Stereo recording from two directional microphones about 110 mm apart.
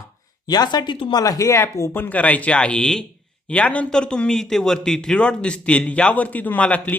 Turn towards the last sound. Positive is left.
turn(degrees=15)  # may be behind; listen again after turning